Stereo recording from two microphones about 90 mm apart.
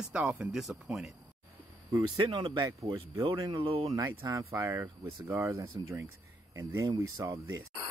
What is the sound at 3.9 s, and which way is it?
Speech, 35° right (ahead or behind).